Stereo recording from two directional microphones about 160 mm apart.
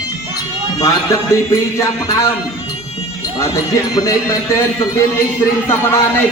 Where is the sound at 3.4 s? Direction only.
20° left (ahead or behind).